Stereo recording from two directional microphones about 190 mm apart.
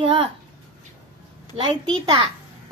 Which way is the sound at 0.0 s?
25° right (ahead or behind).